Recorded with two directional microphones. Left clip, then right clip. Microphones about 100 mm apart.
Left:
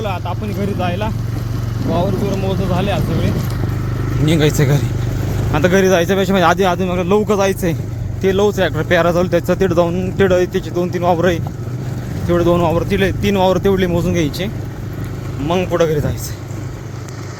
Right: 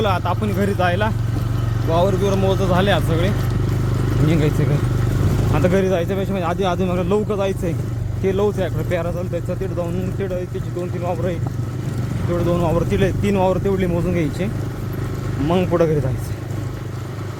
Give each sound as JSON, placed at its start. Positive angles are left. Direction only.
{"t": 0.0, "sound": "speech", "side_deg": -35}
{"t": 0.8, "sound": "speech", "side_deg": -15}
{"t": 4.3, "sound": "speech", "side_deg": 35}
{"t": 5.5, "sound": "speech", "side_deg": 20}
{"t": 6.5, "sound": "speech", "side_deg": 20}
{"t": 6.7, "sound": "speech", "side_deg": 5}
{"t": 7.3, "sound": "speech", "side_deg": 35}
{"t": 8.2, "sound": "speech", "side_deg": 15}
{"t": 8.6, "sound": "speech", "side_deg": 35}
{"t": 10.8, "sound": "speech", "side_deg": 40}
{"t": 12.8, "sound": "speech", "side_deg": 5}
{"t": 13.5, "sound": "speech", "side_deg": 20}